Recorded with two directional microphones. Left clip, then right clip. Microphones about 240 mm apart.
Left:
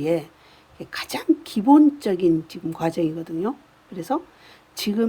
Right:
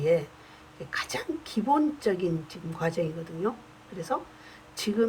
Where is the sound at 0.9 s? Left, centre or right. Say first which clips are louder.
Left 8 dB; left.